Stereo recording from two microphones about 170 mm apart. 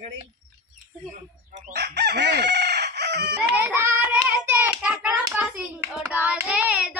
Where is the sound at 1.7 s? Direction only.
80° right.